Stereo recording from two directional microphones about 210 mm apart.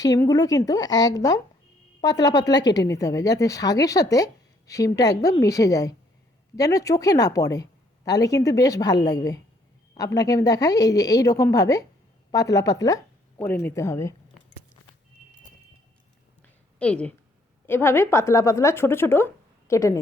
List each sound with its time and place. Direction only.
0.0 s speech: 15° left (ahead or behind)
16.7 s a woman's voice: 5° left (ahead or behind)